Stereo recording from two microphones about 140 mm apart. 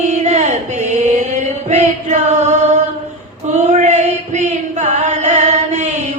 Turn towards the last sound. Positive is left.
turn(degrees=-55)  # may be behind; listen again after turning